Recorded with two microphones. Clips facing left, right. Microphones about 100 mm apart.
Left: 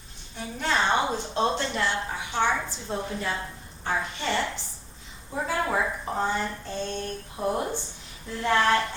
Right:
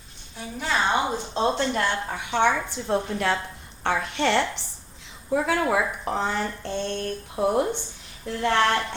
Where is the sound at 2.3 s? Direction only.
65° right (ahead or behind); by 7.5 s 80° right.